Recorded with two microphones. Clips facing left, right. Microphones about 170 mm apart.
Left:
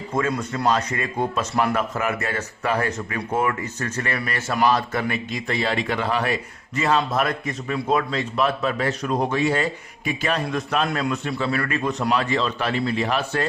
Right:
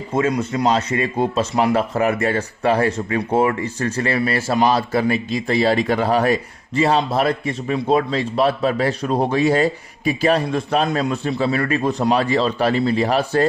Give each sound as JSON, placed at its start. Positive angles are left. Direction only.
{"t": 0.1, "sound": "speech", "side_deg": -25}